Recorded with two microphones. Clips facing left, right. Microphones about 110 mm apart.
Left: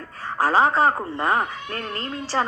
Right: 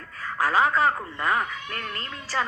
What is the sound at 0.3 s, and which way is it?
A woman's voice, 30° left (ahead or behind).